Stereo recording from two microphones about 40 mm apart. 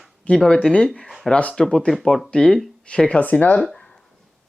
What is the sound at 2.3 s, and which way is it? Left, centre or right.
Speech, centre.